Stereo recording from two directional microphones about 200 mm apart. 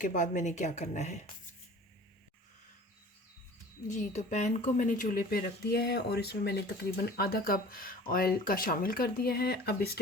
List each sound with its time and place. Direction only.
0.0 s a woman's voice: 40° left (ahead or behind)
3.8 s speech: 35° left (ahead or behind); by 10.0 s 50° left (ahead or behind)